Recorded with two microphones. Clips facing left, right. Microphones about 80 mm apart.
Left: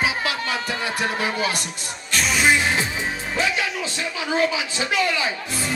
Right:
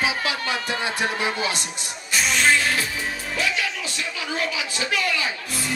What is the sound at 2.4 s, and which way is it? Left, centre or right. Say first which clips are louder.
Music: left 2 dB; centre.